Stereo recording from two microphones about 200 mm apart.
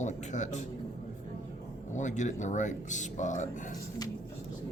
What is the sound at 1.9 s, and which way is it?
Speech, 40° left (ahead or behind).